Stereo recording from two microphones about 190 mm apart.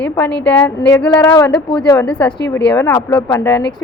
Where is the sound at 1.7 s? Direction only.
20° left (ahead or behind).